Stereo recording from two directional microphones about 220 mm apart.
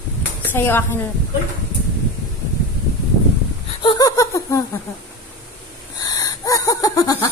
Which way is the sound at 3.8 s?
20° left (ahead or behind).